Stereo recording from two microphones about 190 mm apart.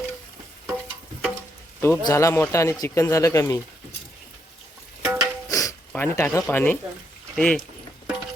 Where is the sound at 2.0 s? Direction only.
20° left (ahead or behind).